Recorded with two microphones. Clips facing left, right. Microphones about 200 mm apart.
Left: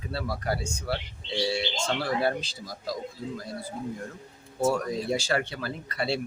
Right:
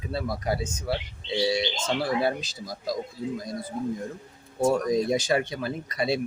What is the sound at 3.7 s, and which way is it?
Speech, 50° right (ahead or behind).